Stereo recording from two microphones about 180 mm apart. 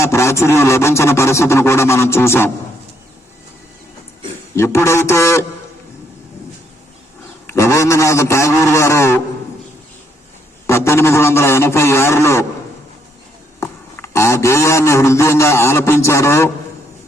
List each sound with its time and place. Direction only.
0.0 s speech: 15° left (ahead or behind)
4.5 s speech: 15° left (ahead or behind)
7.4 s speech: 15° left (ahead or behind)
10.7 s speech: 15° left (ahead or behind)
13.6 s a sound: 15° left (ahead or behind)